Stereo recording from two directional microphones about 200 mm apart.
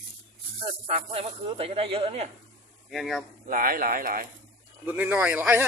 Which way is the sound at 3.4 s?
45° right (ahead or behind).